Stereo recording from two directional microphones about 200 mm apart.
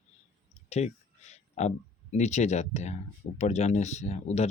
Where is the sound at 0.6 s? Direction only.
35° left (ahead or behind).